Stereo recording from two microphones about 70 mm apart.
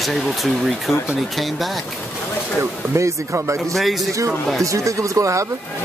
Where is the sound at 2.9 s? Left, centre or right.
Right.